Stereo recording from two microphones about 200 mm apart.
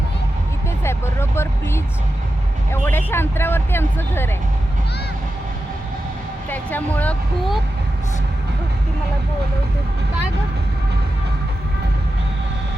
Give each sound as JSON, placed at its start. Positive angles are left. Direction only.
{"t": 0.9, "sound": "speech", "side_deg": 10}
{"t": 2.8, "sound": "speech", "side_deg": 10}
{"t": 6.5, "sound": "speech", "side_deg": 10}